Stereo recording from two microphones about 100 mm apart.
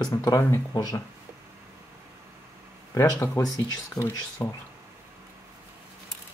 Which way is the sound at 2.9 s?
30° left (ahead or behind).